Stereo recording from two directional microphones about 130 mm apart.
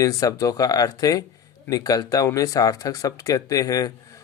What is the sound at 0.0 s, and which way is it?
Speech, 25° left (ahead or behind).